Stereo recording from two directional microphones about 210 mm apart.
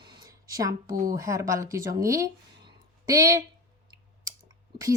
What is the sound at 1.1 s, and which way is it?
Speech, 15° right (ahead or behind).